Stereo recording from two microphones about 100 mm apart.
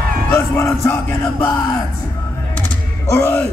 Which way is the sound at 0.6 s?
30° left (ahead or behind).